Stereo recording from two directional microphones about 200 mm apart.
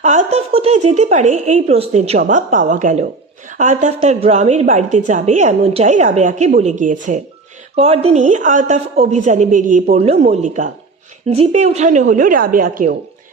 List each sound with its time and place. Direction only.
0.0 s a woman's voice: 35° right (ahead or behind)
7.8 s a woman's voice: 30° right (ahead or behind)